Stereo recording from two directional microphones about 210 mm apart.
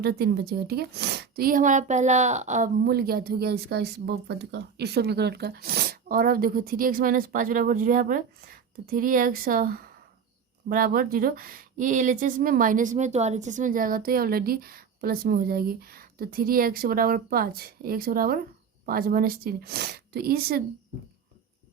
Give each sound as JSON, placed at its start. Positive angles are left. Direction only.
{"t": 0.0, "sound": "a woman's voice", "side_deg": -50}